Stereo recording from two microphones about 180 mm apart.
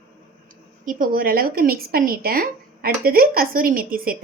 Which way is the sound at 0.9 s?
50° right (ahead or behind).